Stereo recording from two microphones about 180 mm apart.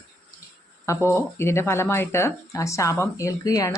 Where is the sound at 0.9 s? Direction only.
15° left (ahead or behind).